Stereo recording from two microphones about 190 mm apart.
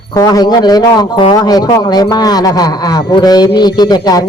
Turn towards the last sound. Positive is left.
turn(degrees=20)  # may be behind; listen again after turning